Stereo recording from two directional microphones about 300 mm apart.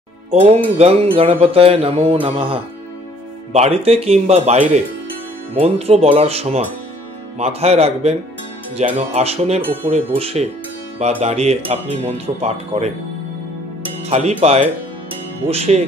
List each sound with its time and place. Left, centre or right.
0.3 s speech: right
14.0 s speech: right